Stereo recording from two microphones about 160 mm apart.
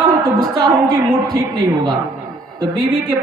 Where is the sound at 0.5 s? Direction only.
25° right (ahead or behind).